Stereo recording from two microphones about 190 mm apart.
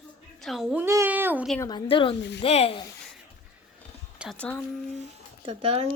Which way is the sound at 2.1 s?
65° left (ahead or behind).